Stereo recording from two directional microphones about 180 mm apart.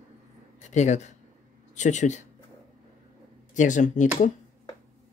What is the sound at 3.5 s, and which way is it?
Speech, 45° left (ahead or behind).